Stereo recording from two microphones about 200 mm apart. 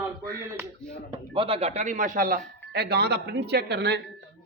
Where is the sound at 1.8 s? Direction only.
40° right (ahead or behind).